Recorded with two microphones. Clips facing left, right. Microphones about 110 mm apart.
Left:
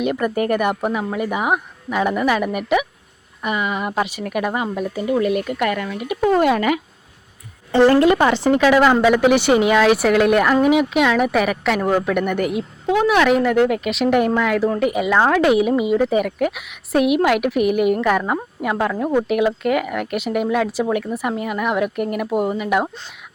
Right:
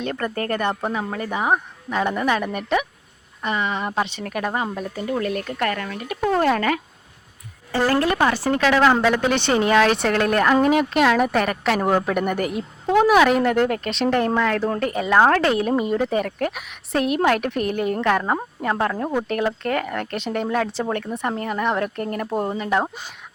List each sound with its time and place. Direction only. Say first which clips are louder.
0.0 s speech: left 6 dB; 10° left (ahead or behind)
7.7 s a woman's voice: left 7 dB; 25° left (ahead or behind)